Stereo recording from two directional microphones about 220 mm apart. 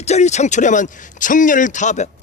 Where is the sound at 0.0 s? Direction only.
30° left (ahead or behind).